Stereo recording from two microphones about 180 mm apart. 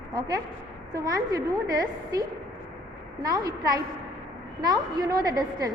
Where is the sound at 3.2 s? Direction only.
20° right (ahead or behind).